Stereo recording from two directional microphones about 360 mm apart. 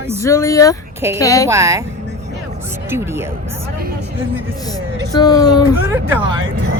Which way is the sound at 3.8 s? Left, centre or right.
Right.